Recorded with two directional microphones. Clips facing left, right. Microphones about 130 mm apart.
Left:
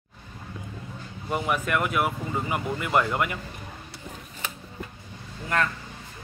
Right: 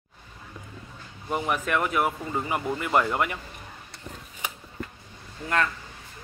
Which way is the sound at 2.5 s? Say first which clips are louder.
Right 1 dB; 25° right (ahead or behind).